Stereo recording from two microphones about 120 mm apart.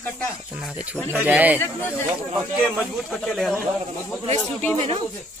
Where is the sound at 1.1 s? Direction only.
15° right (ahead or behind).